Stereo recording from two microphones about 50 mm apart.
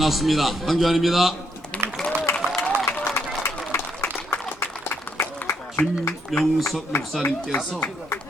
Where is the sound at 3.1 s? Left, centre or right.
Left.